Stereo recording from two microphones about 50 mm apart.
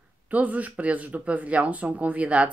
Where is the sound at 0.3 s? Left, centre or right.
Right.